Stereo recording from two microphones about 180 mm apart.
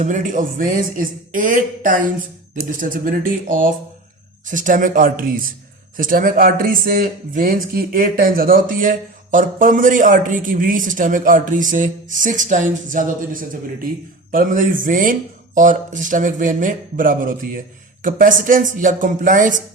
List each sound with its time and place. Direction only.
0.0 s speech: 45° right (ahead or behind)